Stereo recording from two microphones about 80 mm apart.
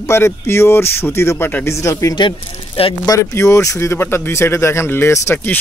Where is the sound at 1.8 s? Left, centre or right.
Left.